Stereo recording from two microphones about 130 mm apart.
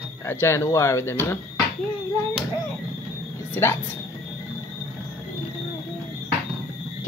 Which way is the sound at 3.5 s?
15° left (ahead or behind).